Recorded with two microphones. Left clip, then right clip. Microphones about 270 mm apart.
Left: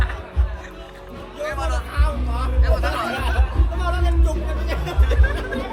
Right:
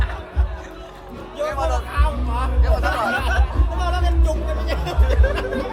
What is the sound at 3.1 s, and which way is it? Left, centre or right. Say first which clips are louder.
Music: right 3 dB; centre.